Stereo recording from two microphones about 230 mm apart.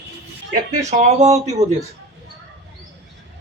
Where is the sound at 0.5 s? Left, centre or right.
Right.